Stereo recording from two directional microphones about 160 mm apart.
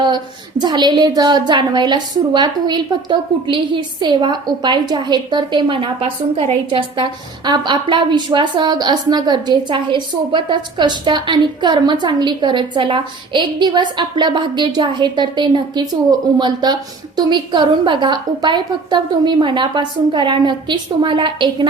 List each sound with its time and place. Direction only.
0.6 s a woman's voice: 25° right (ahead or behind)